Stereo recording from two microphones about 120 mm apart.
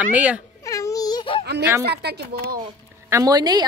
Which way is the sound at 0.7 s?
30° left (ahead or behind).